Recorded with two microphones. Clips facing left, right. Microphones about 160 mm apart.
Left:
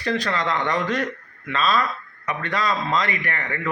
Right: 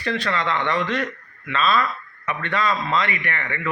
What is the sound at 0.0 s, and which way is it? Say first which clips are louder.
A man's voice: even; 40° left (ahead or behind).